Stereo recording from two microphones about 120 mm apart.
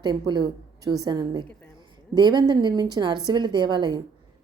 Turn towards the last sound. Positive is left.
turn(degrees=-40)  # may be behind; listen again after turning